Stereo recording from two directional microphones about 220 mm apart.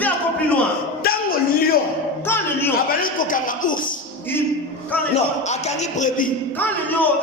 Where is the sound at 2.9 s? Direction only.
40° left (ahead or behind).